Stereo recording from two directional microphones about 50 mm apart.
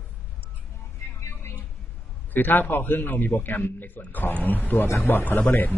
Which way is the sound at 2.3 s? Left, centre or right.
Left.